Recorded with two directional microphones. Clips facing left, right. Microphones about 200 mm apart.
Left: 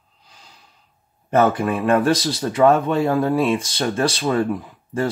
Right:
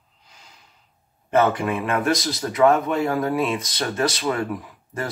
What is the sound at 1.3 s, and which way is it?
Speech, 35° left (ahead or behind).